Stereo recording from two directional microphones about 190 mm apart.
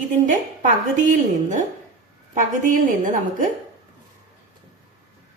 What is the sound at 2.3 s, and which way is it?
A woman's voice, 45° right (ahead or behind).